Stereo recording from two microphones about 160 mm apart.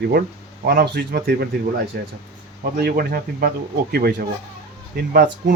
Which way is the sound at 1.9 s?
90° right.